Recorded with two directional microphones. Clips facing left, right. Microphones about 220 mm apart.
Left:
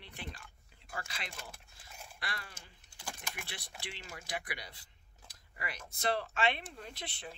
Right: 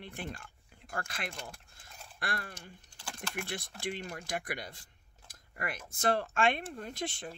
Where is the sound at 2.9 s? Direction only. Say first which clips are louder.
Right 2 dB; 10° left (ahead or behind).